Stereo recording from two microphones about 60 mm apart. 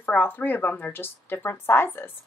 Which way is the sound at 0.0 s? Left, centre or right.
Left.